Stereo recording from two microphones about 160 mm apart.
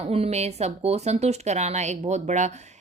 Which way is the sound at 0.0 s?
40° right (ahead or behind).